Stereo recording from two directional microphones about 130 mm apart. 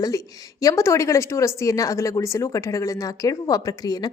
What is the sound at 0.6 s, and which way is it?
A woman's voice, 25° left (ahead or behind).